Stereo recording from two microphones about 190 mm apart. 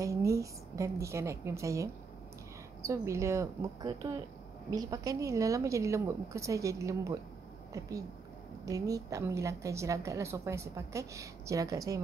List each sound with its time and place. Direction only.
0.0 s a woman's voice: 15° right (ahead or behind)
8.6 s a woman's voice: 20° right (ahead or behind)